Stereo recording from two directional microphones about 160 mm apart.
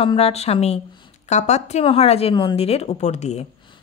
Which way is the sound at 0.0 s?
35° left (ahead or behind).